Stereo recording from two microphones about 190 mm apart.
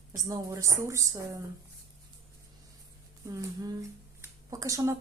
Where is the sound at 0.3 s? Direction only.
15° right (ahead or behind).